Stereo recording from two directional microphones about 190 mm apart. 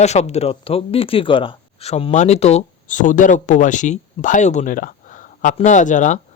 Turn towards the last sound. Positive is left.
turn(degrees=40)  # may be behind; listen again after turning